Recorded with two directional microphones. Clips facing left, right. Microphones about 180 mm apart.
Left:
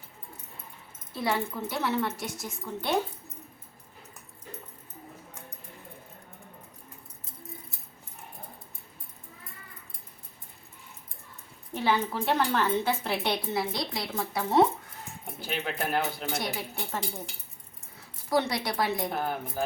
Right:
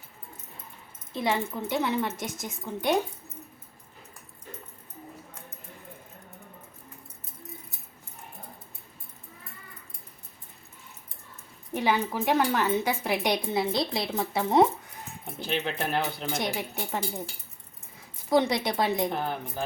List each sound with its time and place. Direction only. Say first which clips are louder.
1.1 s a woman's voice: right 1 dB; 20° right (ahead or behind)
11.7 s a woman's voice: right 1 dB; 15° right (ahead or behind)
15.4 s speech: right 3 dB; 5° left (ahead or behind)
16.4 s a woman's voice: right 3 dB; 20° right (ahead or behind)
18.3 s speech: right 4 dB; 20° right (ahead or behind)
19.1 s speech: even; 10° left (ahead or behind)